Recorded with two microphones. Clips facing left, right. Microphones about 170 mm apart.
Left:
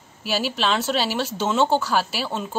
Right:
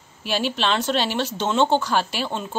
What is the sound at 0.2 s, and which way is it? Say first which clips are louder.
Speech: even; 5° left (ahead or behind).